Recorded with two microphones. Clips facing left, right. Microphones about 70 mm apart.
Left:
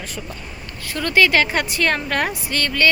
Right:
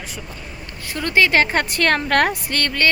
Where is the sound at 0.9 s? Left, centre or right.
Right.